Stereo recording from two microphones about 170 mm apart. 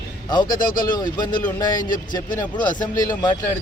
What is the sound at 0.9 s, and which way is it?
Speech, 25° left (ahead or behind).